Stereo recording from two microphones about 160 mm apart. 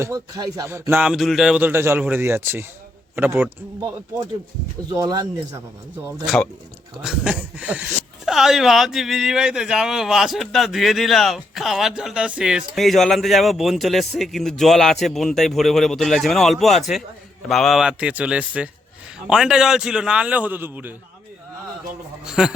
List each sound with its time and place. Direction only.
0.0 s a man's voice: 20° right (ahead or behind)
4.9 s speech: 25° right (ahead or behind)
6.2 s a man's voice: centre (ahead or behind)
22.3 s speech: 5° right (ahead or behind)